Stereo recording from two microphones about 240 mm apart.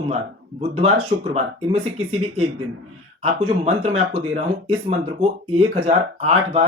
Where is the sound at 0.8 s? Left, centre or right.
Right.